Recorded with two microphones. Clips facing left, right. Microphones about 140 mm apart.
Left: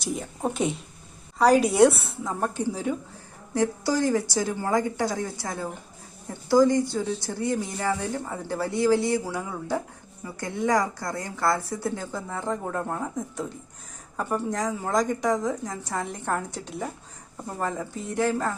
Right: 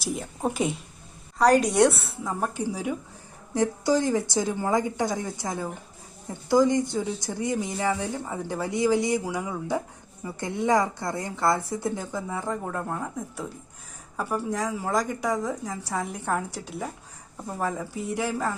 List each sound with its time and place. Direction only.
0.0 s a woman's voice: centre (ahead or behind)